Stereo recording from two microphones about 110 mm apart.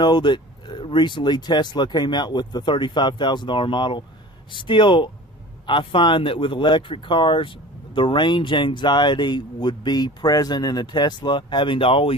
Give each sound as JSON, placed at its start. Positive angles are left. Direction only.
{"t": 0.0, "sound": "speech", "side_deg": 45}